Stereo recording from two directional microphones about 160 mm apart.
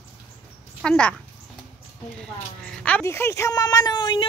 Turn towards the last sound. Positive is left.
turn(degrees=30)  # may be behind; listen again after turning